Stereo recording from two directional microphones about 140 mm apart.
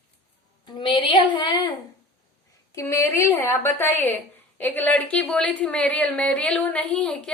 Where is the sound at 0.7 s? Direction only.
35° left (ahead or behind).